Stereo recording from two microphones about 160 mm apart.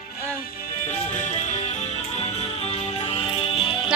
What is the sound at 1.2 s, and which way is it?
Music, 45° left (ahead or behind).